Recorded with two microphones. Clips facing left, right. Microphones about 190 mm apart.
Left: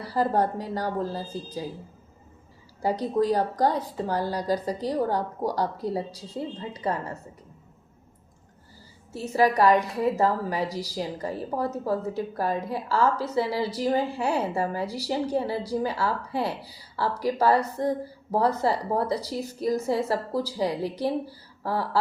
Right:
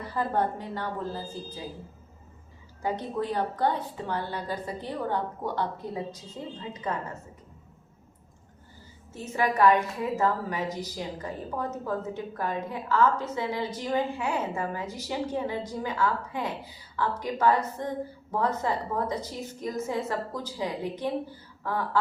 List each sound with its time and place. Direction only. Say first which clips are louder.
0.0 s a woman's voice: left 4 dB; 35° left (ahead or behind)
2.8 s a woman's voice: left 6 dB; 35° left (ahead or behind)
9.1 s a woman's voice: left 5 dB; 35° left (ahead or behind)